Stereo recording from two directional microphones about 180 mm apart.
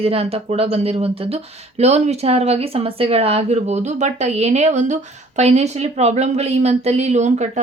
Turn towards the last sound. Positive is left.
turn(degrees=-40)  # may be behind; listen again after turning